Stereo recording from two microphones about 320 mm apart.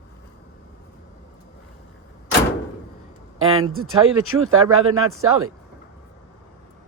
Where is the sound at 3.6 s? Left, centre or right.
Right.